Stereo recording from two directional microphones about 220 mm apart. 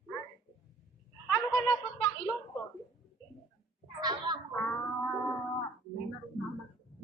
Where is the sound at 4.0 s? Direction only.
20° right (ahead or behind).